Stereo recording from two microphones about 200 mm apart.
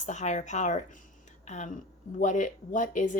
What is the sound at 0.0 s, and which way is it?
Speech, 35° left (ahead or behind).